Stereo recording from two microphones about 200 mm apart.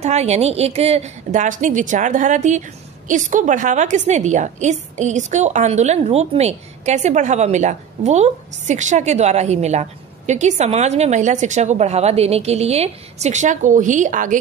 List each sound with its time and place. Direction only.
0.0 s a woman's voice: 35° right (ahead or behind)